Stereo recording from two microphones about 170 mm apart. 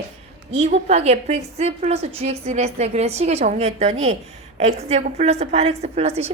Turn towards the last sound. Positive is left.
turn(degrees=-40)  # may be behind; listen again after turning